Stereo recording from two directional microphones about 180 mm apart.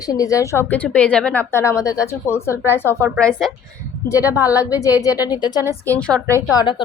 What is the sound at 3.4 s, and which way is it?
Speech, centre (ahead or behind).